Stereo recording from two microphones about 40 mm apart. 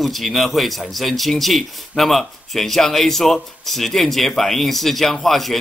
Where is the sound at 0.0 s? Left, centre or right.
Centre.